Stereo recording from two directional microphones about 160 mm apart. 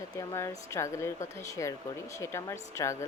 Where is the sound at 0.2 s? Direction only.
20° left (ahead or behind).